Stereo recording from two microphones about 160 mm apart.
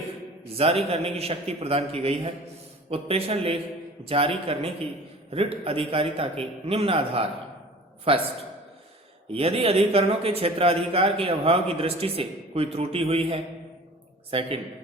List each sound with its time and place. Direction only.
0.4 s speech: 40° right (ahead or behind)
9.3 s speech: 35° right (ahead or behind)